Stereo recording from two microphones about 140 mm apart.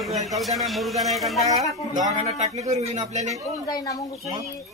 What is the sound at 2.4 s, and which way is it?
Speech, 55° right (ahead or behind).